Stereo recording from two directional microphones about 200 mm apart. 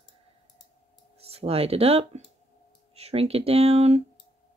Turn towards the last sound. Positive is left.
turn(degrees=-30)  # may be behind; listen again after turning